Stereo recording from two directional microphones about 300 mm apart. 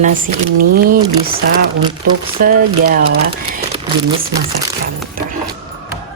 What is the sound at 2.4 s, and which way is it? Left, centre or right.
Speech, right.